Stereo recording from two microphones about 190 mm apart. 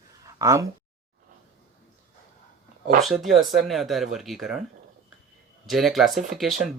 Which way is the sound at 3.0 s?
Centre (ahead or behind).